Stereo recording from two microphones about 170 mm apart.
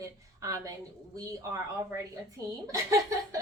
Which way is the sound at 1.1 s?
20° right (ahead or behind).